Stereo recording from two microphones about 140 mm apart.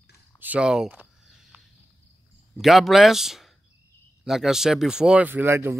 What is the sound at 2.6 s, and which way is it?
Speech, centre (ahead or behind).